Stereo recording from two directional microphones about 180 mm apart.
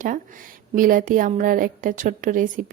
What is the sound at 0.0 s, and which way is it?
A woman's voice, 50° right (ahead or behind).